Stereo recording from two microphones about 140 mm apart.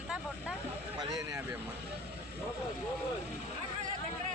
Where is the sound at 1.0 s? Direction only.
25° right (ahead or behind).